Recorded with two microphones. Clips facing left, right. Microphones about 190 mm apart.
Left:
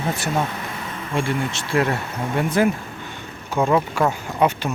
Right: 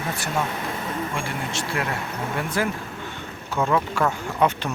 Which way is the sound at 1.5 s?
25° left (ahead or behind).